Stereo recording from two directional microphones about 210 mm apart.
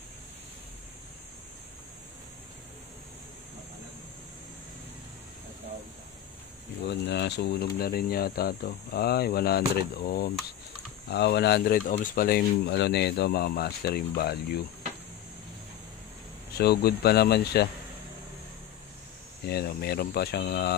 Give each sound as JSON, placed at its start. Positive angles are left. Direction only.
{"t": 6.9, "sound": "speech", "side_deg": 55}
{"t": 16.5, "sound": "speech", "side_deg": 50}
{"t": 19.4, "sound": "speech", "side_deg": 50}